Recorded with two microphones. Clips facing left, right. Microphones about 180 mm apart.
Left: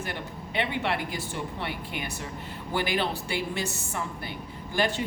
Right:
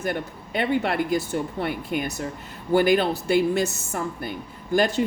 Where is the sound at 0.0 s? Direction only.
45° right (ahead or behind).